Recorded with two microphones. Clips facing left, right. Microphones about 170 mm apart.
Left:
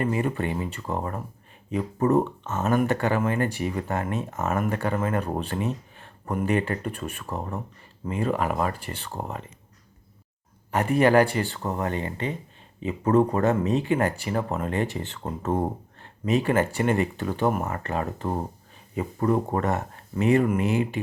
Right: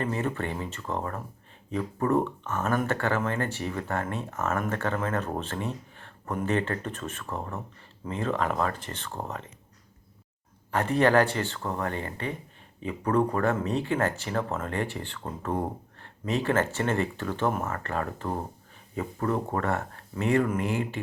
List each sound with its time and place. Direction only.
0.0 s speech: 10° left (ahead or behind)
10.7 s speech: 15° left (ahead or behind)